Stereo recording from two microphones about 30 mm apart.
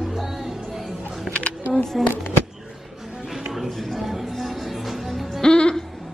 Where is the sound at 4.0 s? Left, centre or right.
Centre.